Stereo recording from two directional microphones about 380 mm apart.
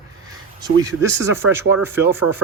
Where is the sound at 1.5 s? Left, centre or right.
Centre.